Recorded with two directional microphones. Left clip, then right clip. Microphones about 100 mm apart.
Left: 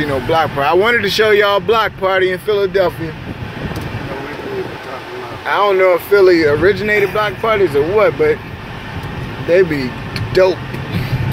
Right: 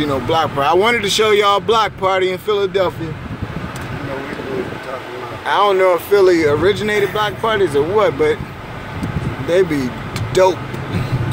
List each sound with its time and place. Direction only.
0.0 s speech: 25° right (ahead or behind)
5.5 s speech: 25° right (ahead or behind)
9.5 s speech: 25° right (ahead or behind)